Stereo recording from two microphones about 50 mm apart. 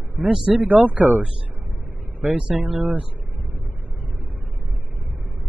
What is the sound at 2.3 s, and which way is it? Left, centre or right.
Speech, right.